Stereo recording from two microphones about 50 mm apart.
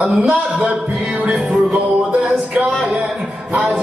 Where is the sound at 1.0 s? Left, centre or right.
Right.